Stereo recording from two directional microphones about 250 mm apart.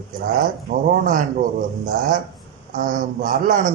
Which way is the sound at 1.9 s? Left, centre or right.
Right.